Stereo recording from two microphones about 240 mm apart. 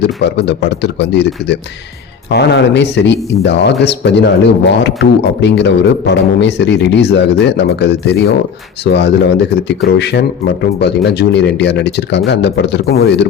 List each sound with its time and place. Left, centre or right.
0.4 s speech: left